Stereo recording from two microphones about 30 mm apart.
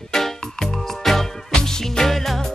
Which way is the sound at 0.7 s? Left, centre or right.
Centre.